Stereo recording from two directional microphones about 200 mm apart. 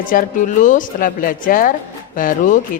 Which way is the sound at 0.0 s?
45° left (ahead or behind).